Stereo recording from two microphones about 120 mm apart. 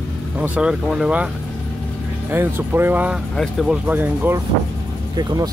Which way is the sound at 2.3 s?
20° right (ahead or behind).